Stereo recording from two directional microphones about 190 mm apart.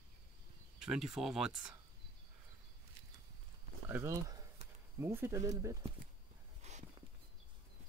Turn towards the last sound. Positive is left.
turn(degrees=-35)  # may be behind; listen again after turning